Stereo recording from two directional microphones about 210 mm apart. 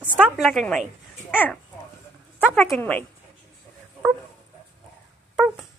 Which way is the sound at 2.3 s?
5° left (ahead or behind).